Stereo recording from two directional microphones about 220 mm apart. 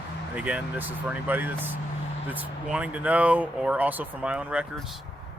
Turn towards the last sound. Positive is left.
turn(degrees=-5)  # may be behind; listen again after turning